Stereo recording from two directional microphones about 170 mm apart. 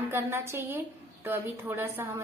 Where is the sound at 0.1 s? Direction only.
15° right (ahead or behind).